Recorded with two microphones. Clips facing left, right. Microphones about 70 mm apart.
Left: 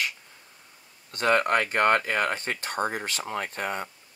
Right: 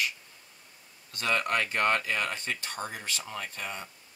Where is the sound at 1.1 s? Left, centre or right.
Left.